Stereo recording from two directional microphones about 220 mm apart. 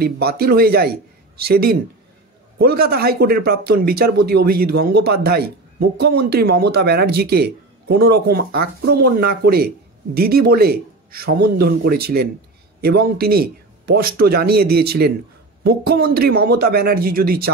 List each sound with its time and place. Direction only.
0.0 s speech: 45° right (ahead or behind)